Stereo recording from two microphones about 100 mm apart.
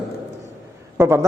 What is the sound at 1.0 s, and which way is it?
Speech, 25° right (ahead or behind).